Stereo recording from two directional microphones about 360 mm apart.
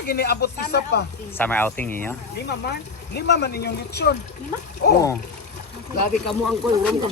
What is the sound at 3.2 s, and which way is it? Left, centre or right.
Speech, left.